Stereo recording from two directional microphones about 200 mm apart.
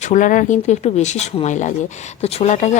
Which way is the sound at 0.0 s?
40° left (ahead or behind).